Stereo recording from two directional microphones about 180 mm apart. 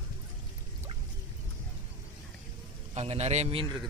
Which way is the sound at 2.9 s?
35° right (ahead or behind).